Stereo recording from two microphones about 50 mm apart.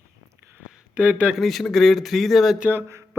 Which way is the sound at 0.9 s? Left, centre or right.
Right.